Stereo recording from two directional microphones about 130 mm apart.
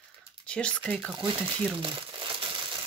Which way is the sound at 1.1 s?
40° right (ahead or behind).